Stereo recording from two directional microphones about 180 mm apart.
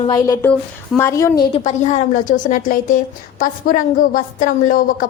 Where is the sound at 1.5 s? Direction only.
40° left (ahead or behind).